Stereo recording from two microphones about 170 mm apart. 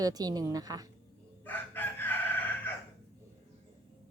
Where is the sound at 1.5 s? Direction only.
10° left (ahead or behind).